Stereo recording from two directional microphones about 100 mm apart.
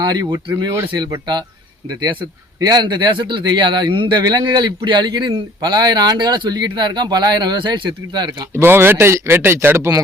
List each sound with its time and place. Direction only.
0.0 s speech: 45° right (ahead or behind)
2.6 s speech: 45° right (ahead or behind)
8.5 s speech: 20° right (ahead or behind)